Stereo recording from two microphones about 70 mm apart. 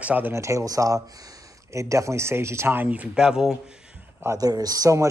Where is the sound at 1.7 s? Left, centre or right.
Right.